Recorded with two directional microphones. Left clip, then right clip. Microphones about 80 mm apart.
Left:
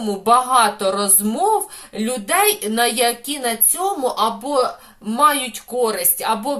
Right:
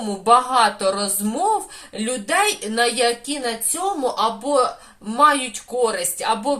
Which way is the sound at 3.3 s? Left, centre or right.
Left.